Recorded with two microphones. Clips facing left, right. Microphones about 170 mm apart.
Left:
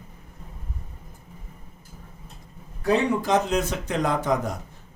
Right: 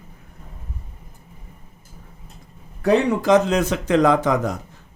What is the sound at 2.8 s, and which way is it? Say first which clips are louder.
Speech: right 5 dB; 90° right.